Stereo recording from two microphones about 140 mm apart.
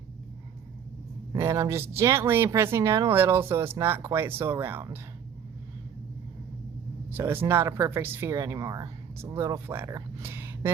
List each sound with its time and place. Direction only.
1.3 s speech: 20° right (ahead or behind)
7.1 s speech: 15° right (ahead or behind)